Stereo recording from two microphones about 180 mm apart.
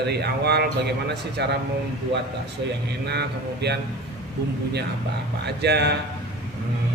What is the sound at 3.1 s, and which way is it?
Speech, 65° right (ahead or behind).